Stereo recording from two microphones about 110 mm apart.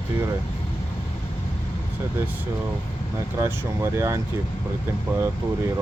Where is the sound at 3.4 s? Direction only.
25° right (ahead or behind).